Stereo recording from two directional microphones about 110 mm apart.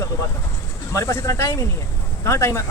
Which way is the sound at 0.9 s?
25° left (ahead or behind).